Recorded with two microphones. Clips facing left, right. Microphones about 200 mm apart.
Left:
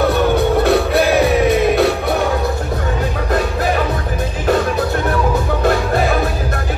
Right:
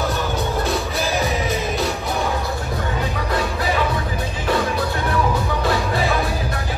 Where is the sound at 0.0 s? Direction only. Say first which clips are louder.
Left 9 dB; 60° left (ahead or behind).